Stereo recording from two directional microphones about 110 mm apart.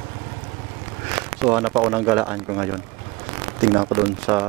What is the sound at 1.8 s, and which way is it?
Speech, 15° right (ahead or behind).